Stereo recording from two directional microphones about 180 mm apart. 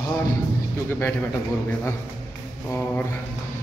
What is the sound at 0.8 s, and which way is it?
Speech, 10° left (ahead or behind).